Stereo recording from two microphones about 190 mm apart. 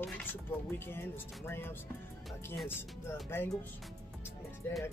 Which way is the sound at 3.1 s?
10° left (ahead or behind).